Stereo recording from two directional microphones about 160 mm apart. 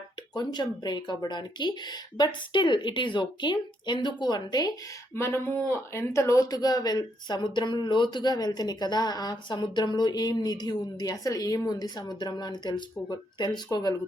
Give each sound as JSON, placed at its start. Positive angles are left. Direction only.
{"t": 0.3, "sound": "speech", "side_deg": 25}
{"t": 5.1, "sound": "speech", "side_deg": 15}